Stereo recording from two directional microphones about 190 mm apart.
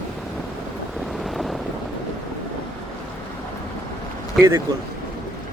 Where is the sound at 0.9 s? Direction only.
Centre (ahead or behind).